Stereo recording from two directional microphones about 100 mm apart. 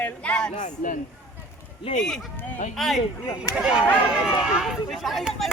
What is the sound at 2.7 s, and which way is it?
Speech, centre (ahead or behind).